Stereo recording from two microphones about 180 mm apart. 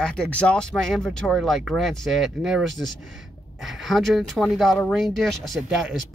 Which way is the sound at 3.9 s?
Centre (ahead or behind).